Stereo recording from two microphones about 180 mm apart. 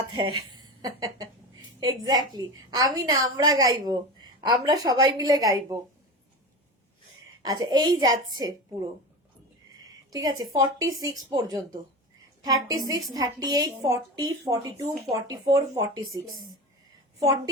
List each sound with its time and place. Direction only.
0.1 s a woman's voice: 25° right (ahead or behind)
7.4 s a woman's voice: 20° right (ahead or behind)
10.1 s a woman's voice: 20° right (ahead or behind)